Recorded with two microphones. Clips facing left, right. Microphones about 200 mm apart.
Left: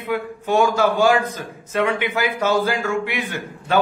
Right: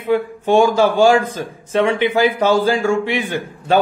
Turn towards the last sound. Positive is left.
turn(degrees=-30)  # may be behind; listen again after turning